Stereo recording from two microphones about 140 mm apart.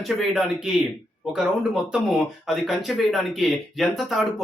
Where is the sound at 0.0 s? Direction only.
Centre (ahead or behind).